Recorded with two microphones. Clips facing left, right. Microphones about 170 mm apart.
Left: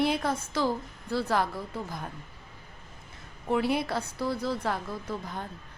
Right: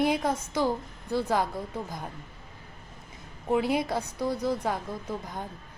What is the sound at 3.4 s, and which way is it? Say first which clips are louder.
A woman's voice: right 1 dB; 15° right (ahead or behind).